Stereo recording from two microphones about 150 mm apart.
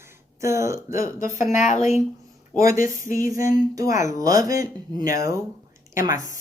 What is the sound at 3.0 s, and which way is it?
Speech, 65° left (ahead or behind).